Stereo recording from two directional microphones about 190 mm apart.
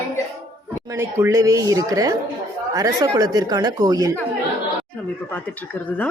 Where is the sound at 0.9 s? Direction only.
15° right (ahead or behind).